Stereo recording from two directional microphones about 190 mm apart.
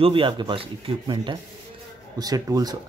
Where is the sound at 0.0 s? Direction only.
25° right (ahead or behind).